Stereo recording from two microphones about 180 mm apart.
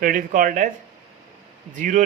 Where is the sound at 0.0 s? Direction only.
50° right (ahead or behind).